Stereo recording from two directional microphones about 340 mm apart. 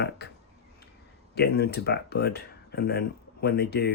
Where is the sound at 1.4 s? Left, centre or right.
Left.